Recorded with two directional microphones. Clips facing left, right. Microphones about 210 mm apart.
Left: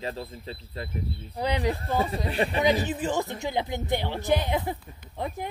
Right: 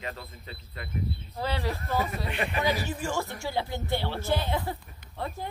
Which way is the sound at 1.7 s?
30° left (ahead or behind).